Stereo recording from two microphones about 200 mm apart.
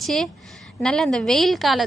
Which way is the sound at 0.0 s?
Centre (ahead or behind).